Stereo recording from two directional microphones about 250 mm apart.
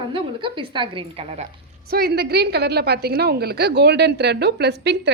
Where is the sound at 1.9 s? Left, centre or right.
Right.